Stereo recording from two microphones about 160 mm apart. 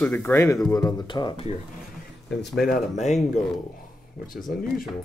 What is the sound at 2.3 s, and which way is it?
Speech, 90° left.